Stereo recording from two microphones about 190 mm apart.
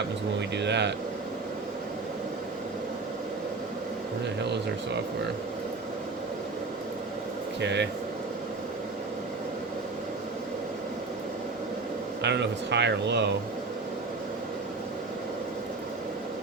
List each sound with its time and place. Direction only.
0.3 s speech: 65° right (ahead or behind)
7.6 s speech: 65° right (ahead or behind)
12.2 s speech: 65° right (ahead or behind)